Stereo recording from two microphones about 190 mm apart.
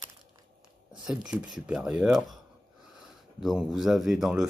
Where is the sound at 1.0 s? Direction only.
5° right (ahead or behind).